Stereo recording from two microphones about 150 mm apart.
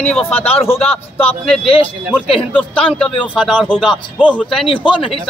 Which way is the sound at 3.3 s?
5° right (ahead or behind).